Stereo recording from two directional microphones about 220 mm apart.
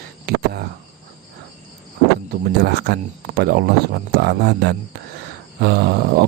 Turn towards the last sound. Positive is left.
turn(degrees=-45)  # may be behind; listen again after turning